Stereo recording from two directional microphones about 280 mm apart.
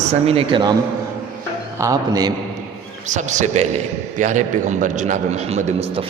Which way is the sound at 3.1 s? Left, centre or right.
Right.